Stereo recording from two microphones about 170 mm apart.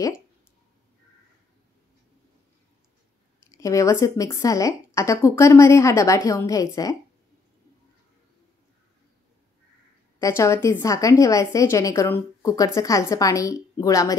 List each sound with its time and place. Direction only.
3.5 s a woman's voice: 20° left (ahead or behind)
10.2 s a woman's voice: 15° left (ahead or behind)